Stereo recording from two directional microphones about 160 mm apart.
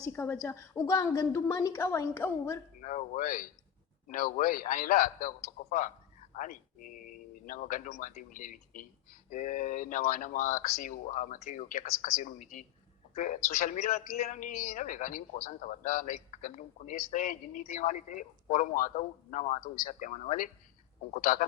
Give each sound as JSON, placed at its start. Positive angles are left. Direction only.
{"t": 0.1, "sound": "a woman's voice", "side_deg": 15}
{"t": 2.8, "sound": "speech", "side_deg": 50}
{"t": 6.3, "sound": "a man's voice", "side_deg": 55}